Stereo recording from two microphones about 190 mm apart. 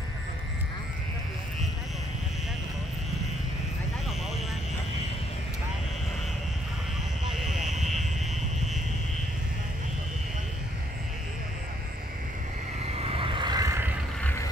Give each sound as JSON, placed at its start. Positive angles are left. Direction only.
{"t": 7.2, "sound": "vehicle", "side_deg": 0}
{"t": 12.9, "sound": "vehicle", "side_deg": -30}